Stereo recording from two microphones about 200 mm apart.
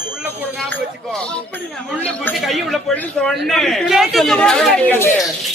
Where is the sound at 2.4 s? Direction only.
Centre (ahead or behind).